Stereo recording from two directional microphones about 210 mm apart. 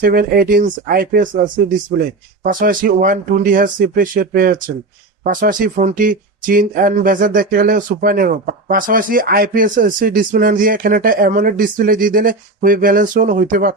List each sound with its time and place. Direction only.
0.0 s speech: 45° right (ahead or behind)
2.4 s speech: 40° right (ahead or behind)